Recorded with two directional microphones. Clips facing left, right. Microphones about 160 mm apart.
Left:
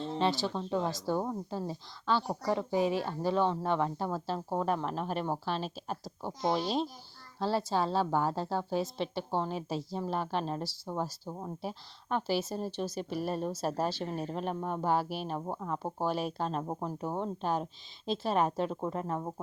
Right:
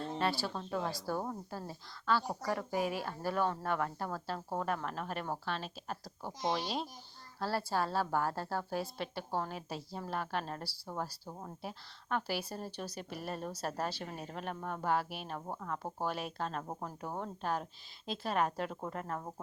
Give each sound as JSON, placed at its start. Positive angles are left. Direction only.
{"t": 0.2, "sound": "a woman's voice", "side_deg": 20}
{"t": 11.6, "sound": "a woman's voice", "side_deg": 30}